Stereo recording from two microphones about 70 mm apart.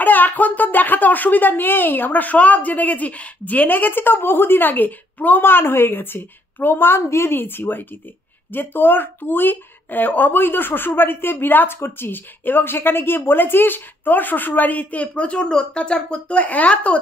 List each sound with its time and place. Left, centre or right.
0.0 s speech: left